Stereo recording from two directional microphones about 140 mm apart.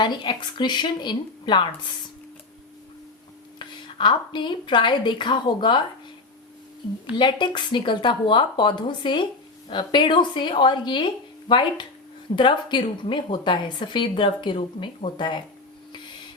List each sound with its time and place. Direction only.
0.0 s a woman's voice: 35° left (ahead or behind)
3.6 s a woman's voice: 35° left (ahead or behind)
7.2 s a woman's voice: 35° left (ahead or behind)